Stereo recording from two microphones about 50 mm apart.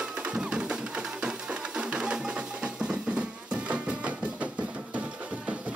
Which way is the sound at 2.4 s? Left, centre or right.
Right.